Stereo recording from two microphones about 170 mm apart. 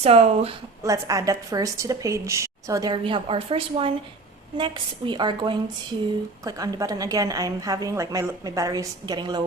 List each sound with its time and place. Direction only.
0.0 s speech: 35° right (ahead or behind)
0.8 s a woman's voice: 20° right (ahead or behind)